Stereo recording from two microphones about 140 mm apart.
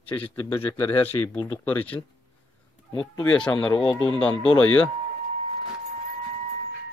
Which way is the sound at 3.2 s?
10° left (ahead or behind).